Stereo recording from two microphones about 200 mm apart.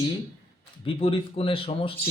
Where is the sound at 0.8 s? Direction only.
25° left (ahead or behind).